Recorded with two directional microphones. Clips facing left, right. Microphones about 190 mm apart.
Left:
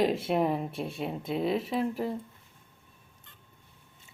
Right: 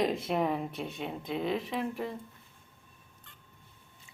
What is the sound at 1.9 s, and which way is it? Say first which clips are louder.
Speech: left 4 dB; 35° left (ahead or behind).